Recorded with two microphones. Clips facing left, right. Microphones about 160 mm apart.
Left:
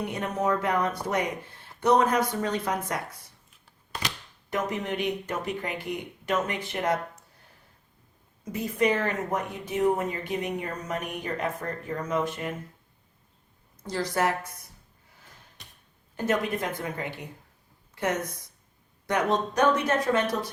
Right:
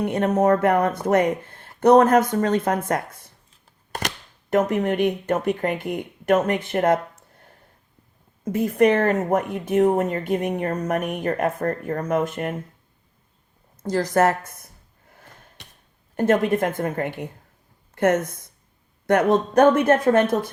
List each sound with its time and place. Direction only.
0.0 s speech: 55° right (ahead or behind)
8.4 s speech: 55° right (ahead or behind)
13.8 s speech: 45° right (ahead or behind)
15.1 s a sound: 55° right (ahead or behind)
16.1 s speech: 50° right (ahead or behind)